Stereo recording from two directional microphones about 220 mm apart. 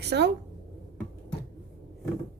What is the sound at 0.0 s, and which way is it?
Speech, 50° right (ahead or behind).